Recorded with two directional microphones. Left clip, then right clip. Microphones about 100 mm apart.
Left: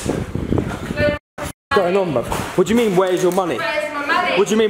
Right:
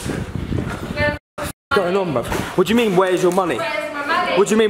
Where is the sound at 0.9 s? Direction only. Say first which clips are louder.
Left 2 dB; 20° right (ahead or behind).